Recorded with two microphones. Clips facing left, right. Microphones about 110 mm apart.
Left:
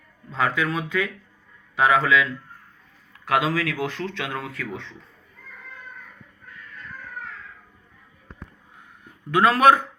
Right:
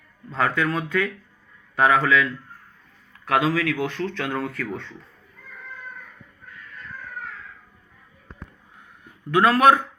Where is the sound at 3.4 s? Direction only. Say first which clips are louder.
Right 2 dB; 30° left (ahead or behind).